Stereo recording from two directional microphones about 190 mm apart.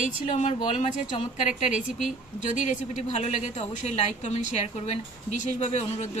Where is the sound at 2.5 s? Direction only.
40° left (ahead or behind).